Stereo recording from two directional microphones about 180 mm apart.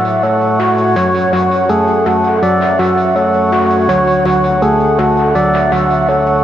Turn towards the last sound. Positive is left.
turn(degrees=0)  # may be behind; listen again after turning